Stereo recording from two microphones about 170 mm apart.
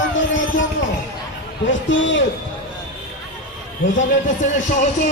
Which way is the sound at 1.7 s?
90° left.